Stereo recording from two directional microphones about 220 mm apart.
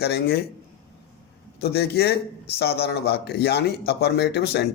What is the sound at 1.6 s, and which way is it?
A man's voice, 45° left (ahead or behind).